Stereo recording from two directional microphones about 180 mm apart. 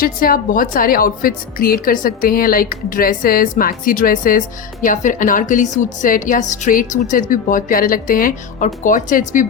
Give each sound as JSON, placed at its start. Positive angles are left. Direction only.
{"t": 0.0, "sound": "a woman's voice", "side_deg": 55}